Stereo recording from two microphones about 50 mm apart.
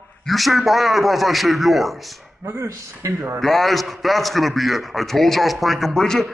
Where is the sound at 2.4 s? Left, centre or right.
Right.